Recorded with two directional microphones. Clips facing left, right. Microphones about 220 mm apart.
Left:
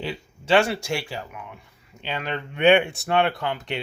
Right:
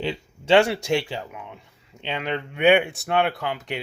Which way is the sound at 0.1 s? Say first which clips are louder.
Right 2 dB; 20° right (ahead or behind).